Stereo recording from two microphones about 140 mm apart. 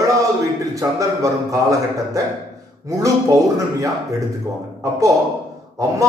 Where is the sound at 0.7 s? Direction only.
25° right (ahead or behind).